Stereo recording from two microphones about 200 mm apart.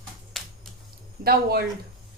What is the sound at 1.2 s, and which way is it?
Speech, 50° right (ahead or behind).